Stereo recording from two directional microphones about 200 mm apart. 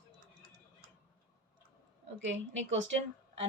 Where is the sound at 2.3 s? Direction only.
65° right (ahead or behind).